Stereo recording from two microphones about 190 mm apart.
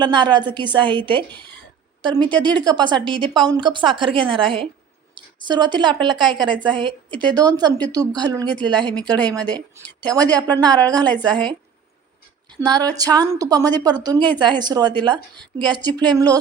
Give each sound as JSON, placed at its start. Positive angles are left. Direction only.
{"t": 0.0, "sound": "a woman's voice", "side_deg": -25}
{"t": 10.9, "sound": "a woman's voice", "side_deg": 5}
{"t": 12.5, "sound": "a woman's voice", "side_deg": -20}